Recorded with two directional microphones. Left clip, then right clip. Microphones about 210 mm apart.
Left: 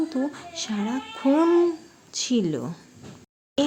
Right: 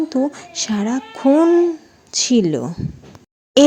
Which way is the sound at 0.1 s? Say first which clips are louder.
Right 8 dB; 25° right (ahead or behind).